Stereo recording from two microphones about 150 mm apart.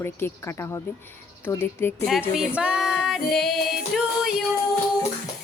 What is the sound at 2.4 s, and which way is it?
Female singing, 5° right (ahead or behind).